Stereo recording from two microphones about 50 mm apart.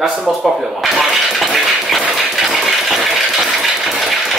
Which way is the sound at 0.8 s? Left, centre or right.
Centre.